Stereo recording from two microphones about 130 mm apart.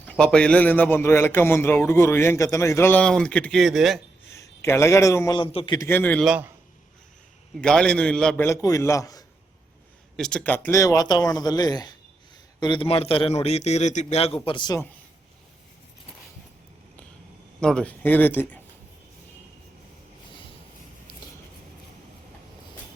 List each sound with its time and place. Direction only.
0.1 s a man's voice: 5° left (ahead or behind)
4.3 s a man's voice: 20° left (ahead or behind)
5.4 s a man's voice: 40° left (ahead or behind)
5.9 s a man's voice: 15° left (ahead or behind)
7.6 s a man's voice: 5° left (ahead or behind)
8.4 s speech: 25° left (ahead or behind)
10.2 s a man's voice: 5° left (ahead or behind); by 14.8 s 35° left (ahead or behind)
17.6 s a man's voice: 5° left (ahead or behind)